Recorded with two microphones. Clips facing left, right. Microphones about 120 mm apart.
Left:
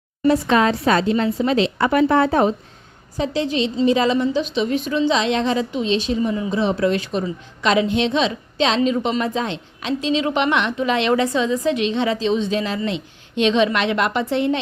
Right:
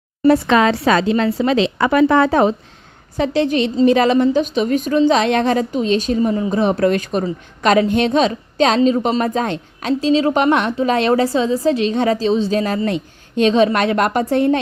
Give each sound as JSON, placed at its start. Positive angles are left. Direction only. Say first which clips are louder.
{"t": 0.3, "sound": "a woman's voice", "louder": "right 3 dB", "side_deg": -70}
{"t": 3.2, "sound": "a woman's voice", "louder": "right 4 dB", "side_deg": -60}